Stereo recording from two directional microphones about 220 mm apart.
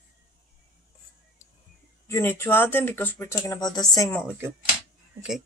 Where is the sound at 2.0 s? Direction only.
10° left (ahead or behind).